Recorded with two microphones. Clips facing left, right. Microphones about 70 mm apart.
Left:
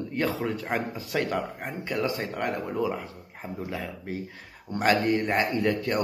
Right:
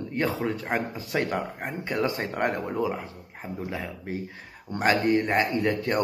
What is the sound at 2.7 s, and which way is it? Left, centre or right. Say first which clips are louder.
Speech: even; centre.